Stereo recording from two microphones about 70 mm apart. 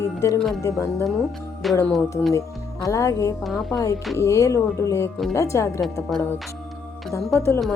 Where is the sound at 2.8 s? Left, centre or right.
Left.